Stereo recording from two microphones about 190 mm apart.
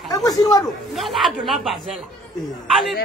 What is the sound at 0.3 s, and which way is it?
Speech, 20° left (ahead or behind).